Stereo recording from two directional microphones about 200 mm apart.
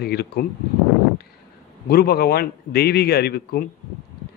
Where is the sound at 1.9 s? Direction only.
50° left (ahead or behind).